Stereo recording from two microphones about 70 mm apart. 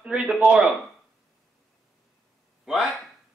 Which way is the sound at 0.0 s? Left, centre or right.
Centre.